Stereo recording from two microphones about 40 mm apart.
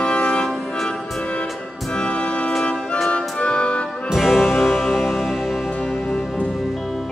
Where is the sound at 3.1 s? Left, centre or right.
Left.